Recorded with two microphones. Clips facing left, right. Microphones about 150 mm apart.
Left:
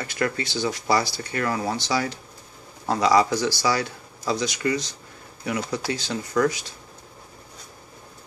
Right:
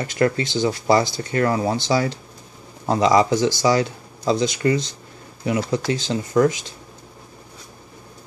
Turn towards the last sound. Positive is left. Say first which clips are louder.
# right 5 dB
turn(degrees=-20)  # may be behind; listen again after turning